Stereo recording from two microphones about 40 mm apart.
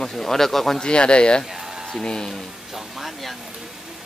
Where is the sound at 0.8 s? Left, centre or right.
Left.